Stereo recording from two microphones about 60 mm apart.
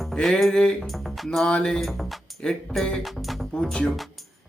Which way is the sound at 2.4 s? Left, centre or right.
Centre.